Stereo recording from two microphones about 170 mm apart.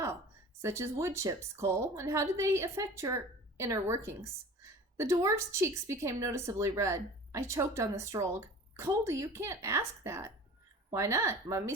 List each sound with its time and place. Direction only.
0.6 s a woman's voice: 15° right (ahead or behind)